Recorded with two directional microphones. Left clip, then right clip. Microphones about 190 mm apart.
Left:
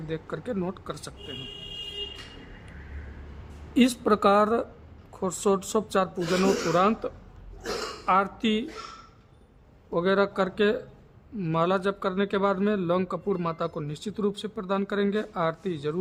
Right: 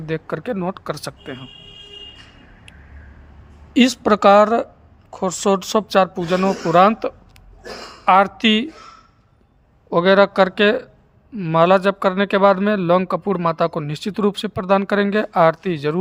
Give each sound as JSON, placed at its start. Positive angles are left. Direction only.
{"t": 0.1, "sound": "speech", "side_deg": -30}
{"t": 3.8, "sound": "a man's voice", "side_deg": -25}
{"t": 9.9, "sound": "a man's voice", "side_deg": -35}